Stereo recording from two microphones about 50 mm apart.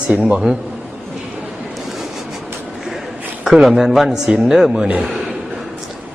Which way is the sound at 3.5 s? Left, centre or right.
Centre.